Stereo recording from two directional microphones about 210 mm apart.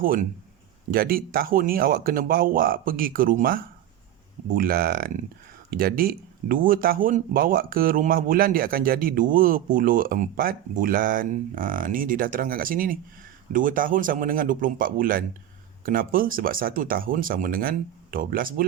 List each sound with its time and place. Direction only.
0.0 s speech: 40° right (ahead or behind)